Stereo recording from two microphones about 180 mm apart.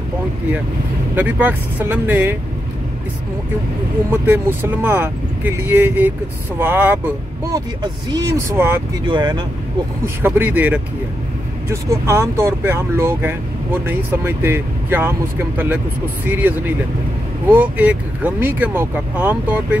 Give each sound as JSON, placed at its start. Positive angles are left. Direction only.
{"t": 1.1, "sound": "speech", "side_deg": -10}
{"t": 4.1, "sound": "speech", "side_deg": -10}
{"t": 9.0, "sound": "speech", "side_deg": -25}
{"t": 10.0, "sound": "speech", "side_deg": -10}